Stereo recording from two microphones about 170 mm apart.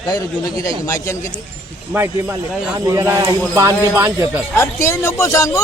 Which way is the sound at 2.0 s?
10° right (ahead or behind).